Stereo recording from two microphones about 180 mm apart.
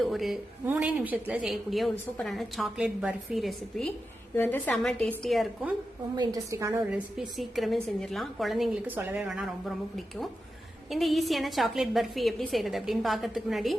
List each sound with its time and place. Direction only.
0.0 s a woman's voice: centre (ahead or behind)
6.1 s a woman's voice: 20° right (ahead or behind)
6.9 s a woman's voice: 5° right (ahead or behind)
10.9 s a woman's voice: centre (ahead or behind)